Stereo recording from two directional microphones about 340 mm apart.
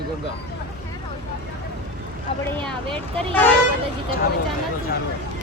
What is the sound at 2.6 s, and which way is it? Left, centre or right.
Speech, centre.